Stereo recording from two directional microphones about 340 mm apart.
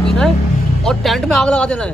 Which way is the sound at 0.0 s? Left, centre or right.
Centre.